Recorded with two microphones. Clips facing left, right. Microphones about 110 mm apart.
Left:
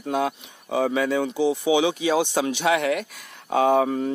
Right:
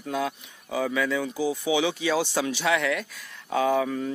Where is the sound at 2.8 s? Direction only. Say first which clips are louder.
Left 3 dB; 55° left (ahead or behind).